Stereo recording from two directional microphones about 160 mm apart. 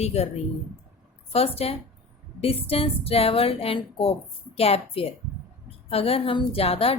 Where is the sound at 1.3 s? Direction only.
40° left (ahead or behind).